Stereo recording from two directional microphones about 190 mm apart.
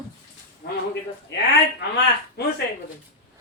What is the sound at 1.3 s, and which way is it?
Speech, 70° left (ahead or behind).